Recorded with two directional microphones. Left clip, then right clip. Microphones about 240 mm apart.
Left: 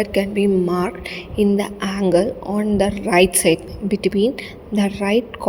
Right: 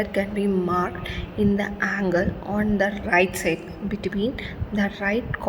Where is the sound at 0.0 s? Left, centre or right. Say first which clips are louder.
Left 6 dB; left.